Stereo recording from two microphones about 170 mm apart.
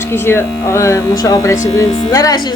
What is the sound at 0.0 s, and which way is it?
A woman's voice, 15° left (ahead or behind).